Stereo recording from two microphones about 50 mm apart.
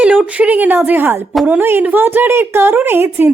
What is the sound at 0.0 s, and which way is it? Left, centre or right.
A woman's voice, right.